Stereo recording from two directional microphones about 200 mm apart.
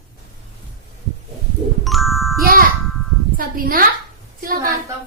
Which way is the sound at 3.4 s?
45° right (ahead or behind).